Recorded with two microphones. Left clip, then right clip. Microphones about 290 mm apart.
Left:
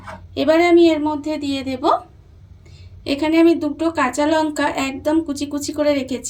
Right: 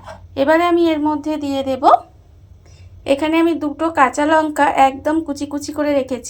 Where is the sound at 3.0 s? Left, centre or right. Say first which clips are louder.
Even; right.